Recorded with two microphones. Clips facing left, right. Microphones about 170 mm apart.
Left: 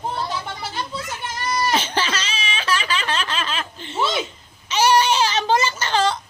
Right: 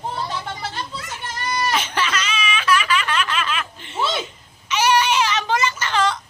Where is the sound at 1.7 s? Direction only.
30° left (ahead or behind).